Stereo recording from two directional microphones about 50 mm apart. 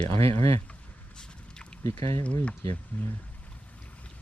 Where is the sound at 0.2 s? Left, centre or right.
Left.